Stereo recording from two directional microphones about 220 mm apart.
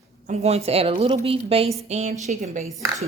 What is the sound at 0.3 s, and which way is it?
Speech, 30° right (ahead or behind).